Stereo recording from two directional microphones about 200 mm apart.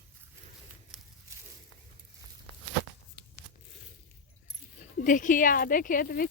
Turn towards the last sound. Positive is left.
turn(degrees=45)  # may be behind; listen again after turning